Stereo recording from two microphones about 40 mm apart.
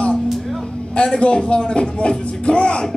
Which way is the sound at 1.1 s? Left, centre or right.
Left.